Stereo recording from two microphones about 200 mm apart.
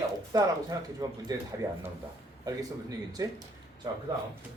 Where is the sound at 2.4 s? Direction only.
20° right (ahead or behind).